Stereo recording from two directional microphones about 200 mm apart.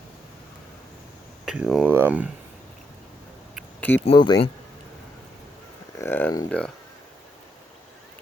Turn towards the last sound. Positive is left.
turn(degrees=5)  # may be behind; listen again after turning